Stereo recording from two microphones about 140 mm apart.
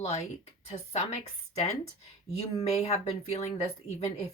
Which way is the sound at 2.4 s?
45° left (ahead or behind).